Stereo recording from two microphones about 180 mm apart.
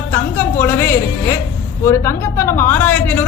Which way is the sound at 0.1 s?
10° left (ahead or behind).